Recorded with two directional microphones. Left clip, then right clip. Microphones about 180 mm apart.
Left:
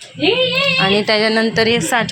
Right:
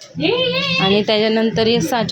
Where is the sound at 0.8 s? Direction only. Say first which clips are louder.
Left 1 dB; 15° right (ahead or behind).